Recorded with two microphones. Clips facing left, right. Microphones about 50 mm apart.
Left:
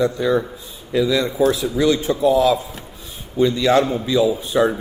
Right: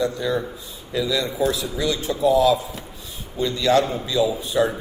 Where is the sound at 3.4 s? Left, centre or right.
Left.